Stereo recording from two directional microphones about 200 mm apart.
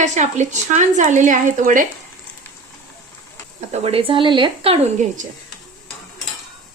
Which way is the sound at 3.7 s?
30° right (ahead or behind).